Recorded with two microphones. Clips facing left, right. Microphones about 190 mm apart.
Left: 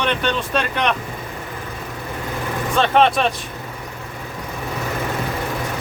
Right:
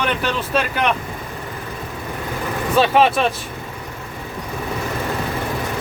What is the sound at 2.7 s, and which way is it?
Speech, 5° right (ahead or behind).